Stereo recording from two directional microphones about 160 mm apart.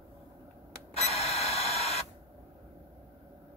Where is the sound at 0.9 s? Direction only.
40° left (ahead or behind).